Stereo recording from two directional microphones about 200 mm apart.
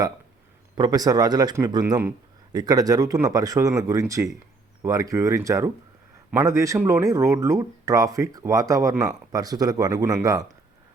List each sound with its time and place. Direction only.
0.8 s speech: 20° right (ahead or behind)